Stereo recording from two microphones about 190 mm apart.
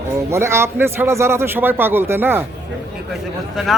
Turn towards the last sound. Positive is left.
turn(degrees=0)  # may be behind; listen again after turning